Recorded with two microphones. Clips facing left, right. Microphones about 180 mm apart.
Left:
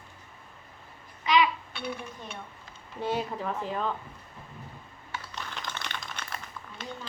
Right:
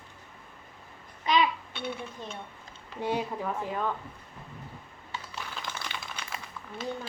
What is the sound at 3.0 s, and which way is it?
Speech, 15° right (ahead or behind).